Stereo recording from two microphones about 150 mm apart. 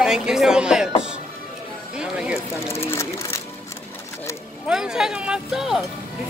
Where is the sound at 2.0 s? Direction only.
5° right (ahead or behind).